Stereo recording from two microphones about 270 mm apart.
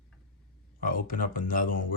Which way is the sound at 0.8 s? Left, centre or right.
Left.